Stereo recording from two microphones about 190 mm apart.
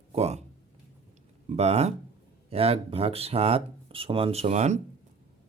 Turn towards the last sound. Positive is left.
turn(degrees=-35)  # may be behind; listen again after turning